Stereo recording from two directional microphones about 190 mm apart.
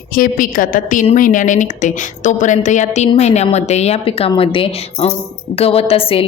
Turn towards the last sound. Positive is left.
turn(degrees=30)  # may be behind; listen again after turning